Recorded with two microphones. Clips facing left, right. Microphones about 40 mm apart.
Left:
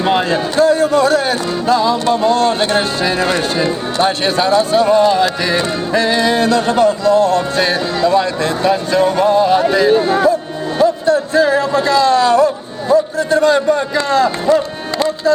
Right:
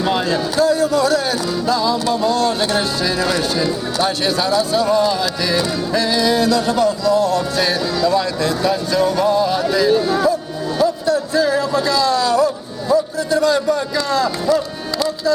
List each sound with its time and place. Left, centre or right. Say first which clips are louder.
0.0 s speech: left 4 dB; left